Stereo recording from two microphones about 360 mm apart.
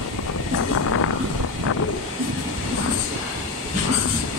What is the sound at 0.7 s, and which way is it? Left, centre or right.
Vehicle, left.